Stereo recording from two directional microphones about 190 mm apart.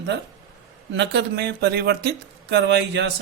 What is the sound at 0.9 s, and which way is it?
Speech, 65° right (ahead or behind).